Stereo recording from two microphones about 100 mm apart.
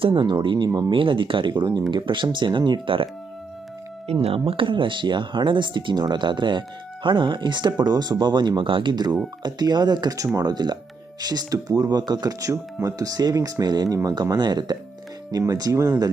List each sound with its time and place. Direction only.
0.0 s speech: 50° right (ahead or behind)
4.0 s speech: 90° right; by 16.1 s 40° right (ahead or behind)